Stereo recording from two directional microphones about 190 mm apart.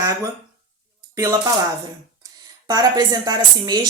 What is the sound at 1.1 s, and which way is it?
Speech, 15° right (ahead or behind).